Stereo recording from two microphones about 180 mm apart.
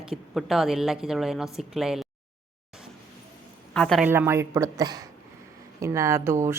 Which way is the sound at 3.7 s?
5° left (ahead or behind).